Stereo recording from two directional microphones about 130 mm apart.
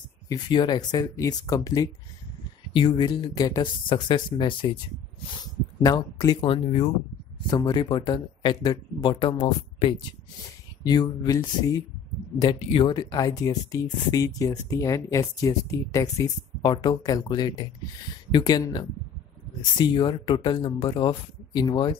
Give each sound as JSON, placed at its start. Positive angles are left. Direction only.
{"t": 0.3, "sound": "speech", "side_deg": 35}
{"t": 5.8, "sound": "speech", "side_deg": 30}
{"t": 6.4, "sound": "speech", "side_deg": 45}
{"t": 7.5, "sound": "speech", "side_deg": 35}